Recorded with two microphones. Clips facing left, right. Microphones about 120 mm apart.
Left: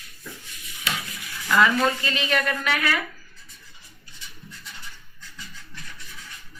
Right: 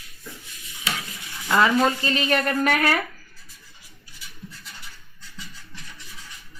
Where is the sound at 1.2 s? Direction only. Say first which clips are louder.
Even; 25° right (ahead or behind); by 3.0 s 45° right (ahead or behind).